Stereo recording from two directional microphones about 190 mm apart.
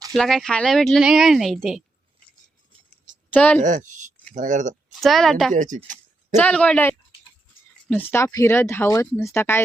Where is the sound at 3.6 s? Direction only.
40° right (ahead or behind).